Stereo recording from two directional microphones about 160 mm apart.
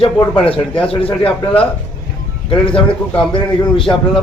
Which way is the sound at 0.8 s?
35° left (ahead or behind).